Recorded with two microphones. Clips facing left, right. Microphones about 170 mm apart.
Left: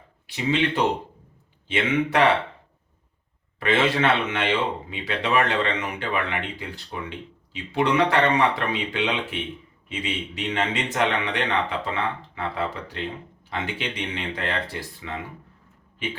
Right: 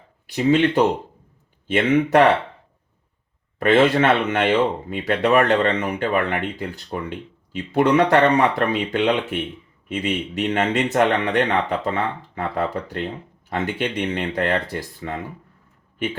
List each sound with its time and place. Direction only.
0.3 s speech: 50° right (ahead or behind)
1.6 s speech: 50° right (ahead or behind)
3.6 s speech: 50° right (ahead or behind)